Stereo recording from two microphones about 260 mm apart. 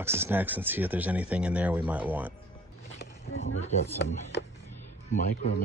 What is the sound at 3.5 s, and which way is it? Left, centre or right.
Speech, left.